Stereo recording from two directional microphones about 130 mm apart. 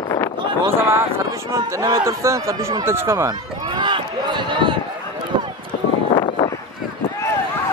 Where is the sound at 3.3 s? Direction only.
35° right (ahead or behind).